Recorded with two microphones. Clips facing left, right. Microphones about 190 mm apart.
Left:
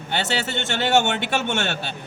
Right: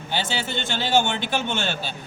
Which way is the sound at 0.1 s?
70° left (ahead or behind).